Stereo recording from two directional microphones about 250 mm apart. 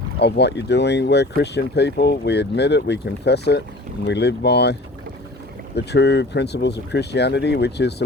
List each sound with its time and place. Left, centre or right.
0.2 s speech: left